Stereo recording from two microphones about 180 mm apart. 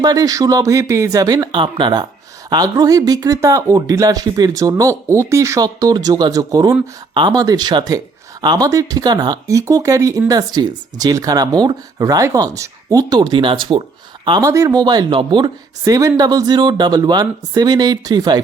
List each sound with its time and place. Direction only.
0.0 s speech: 20° right (ahead or behind)